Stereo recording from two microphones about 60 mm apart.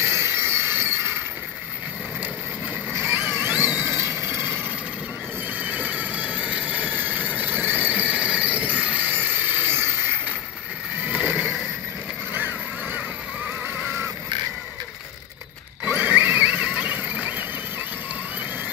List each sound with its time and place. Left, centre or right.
0.0 s a sound: right
2.9 s a sound: right
3.5 s neigh: right
5.6 s train: right
9.1 s music: right
12.3 s vehicle: right
13.8 s vehicle: right
15.8 s horse: right
16.7 s neigh: right